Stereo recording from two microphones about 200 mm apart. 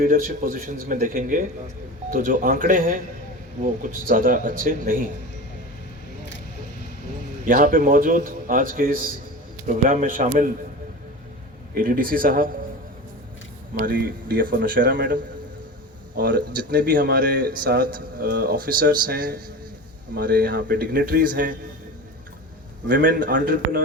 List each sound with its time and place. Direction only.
0.0 s speech: 45° right (ahead or behind)
7.4 s a man's voice: 40° right (ahead or behind)
11.7 s speech: 45° right (ahead or behind)
13.7 s speech: 45° right (ahead or behind)
14.9 s speech: 60° right (ahead or behind)
16.7 s speech: 45° right (ahead or behind)
22.9 s speech: 45° right (ahead or behind)